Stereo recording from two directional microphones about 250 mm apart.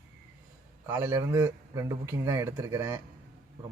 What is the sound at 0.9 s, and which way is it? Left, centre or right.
A man's voice, centre.